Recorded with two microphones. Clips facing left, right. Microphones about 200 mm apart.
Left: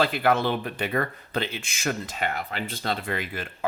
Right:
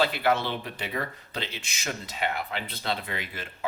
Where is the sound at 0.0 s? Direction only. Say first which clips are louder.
Left 3 dB; 50° left (ahead or behind).